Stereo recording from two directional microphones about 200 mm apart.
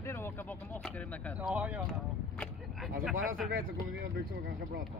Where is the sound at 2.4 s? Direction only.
Centre (ahead or behind).